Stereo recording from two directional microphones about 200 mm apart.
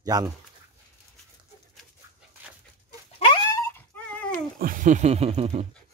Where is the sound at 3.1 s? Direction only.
25° left (ahead or behind).